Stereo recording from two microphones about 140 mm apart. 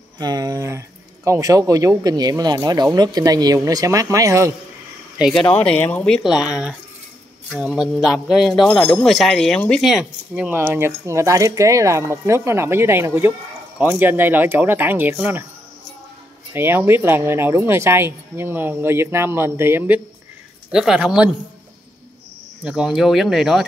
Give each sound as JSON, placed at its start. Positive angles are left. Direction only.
{"t": 0.2, "sound": "speech", "side_deg": -25}
{"t": 5.2, "sound": "speech", "side_deg": 5}
{"t": 16.5, "sound": "speech", "side_deg": -15}
{"t": 20.7, "sound": "speech", "side_deg": -5}
{"t": 22.6, "sound": "speech", "side_deg": -5}